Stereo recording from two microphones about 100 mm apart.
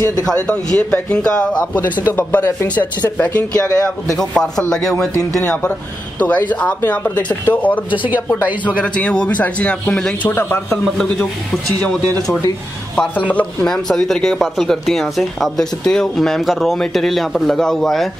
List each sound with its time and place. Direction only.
0.2 s speech: 10° left (ahead or behind)
6.1 s speech: 15° left (ahead or behind)
10.7 s speech: 5° left (ahead or behind)
13.3 s speech: 15° left (ahead or behind)
13.8 s speech: 5° left (ahead or behind)